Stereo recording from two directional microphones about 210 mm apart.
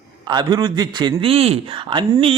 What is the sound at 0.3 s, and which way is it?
A man's voice, 20° right (ahead or behind).